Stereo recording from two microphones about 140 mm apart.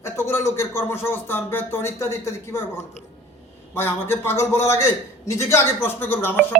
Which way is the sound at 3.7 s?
15° left (ahead or behind).